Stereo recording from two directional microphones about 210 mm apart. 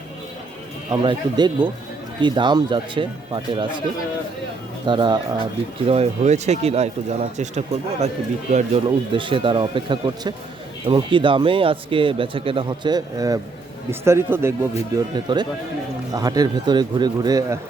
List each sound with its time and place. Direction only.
0.9 s speech: 20° right (ahead or behind)
4.9 s speech: 20° right (ahead or behind)